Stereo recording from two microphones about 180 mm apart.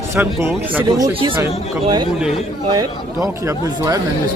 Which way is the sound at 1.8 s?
25° right (ahead or behind).